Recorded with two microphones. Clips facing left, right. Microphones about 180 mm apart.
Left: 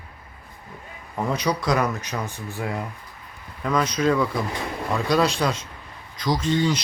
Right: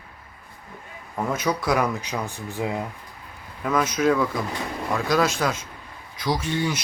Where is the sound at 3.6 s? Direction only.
5° right (ahead or behind).